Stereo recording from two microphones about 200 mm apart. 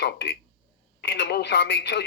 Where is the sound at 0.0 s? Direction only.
55° left (ahead or behind).